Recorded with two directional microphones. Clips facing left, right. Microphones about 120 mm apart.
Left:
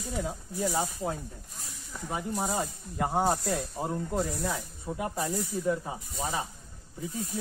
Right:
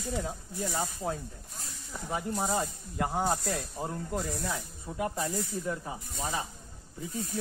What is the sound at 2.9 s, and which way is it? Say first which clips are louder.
Speech: left 3 dB; 20° left (ahead or behind).